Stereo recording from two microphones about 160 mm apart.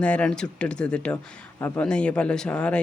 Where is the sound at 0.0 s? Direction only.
10° left (ahead or behind).